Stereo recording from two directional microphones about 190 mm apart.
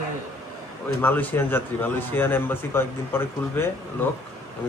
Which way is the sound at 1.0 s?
10° left (ahead or behind).